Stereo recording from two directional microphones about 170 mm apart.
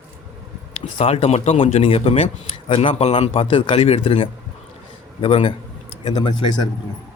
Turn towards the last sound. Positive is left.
turn(degrees=25)  # may be behind; listen again after turning